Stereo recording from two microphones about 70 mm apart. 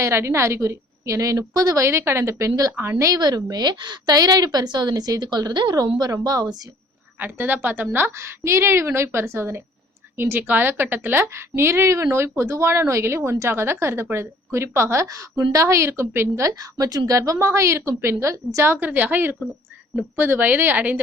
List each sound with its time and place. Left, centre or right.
0.0 s a woman's voice: right
1.8 s a woman's voice: right
2.7 s a woman's voice: right
3.2 s a woman's voice: right
3.5 s a woman's voice: right
5.7 s speech: right
7.2 s a woman's voice: right
15.0 s a woman's voice: right
15.5 s a woman's voice: right
18.8 s speech: right